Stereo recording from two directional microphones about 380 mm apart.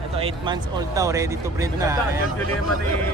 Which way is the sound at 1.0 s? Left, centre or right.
Centre.